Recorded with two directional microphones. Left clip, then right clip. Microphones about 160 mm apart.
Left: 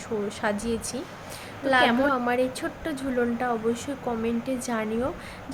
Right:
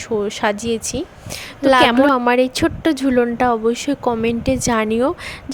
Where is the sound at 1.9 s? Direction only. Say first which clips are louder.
Right 10 dB; 70° right (ahead or behind).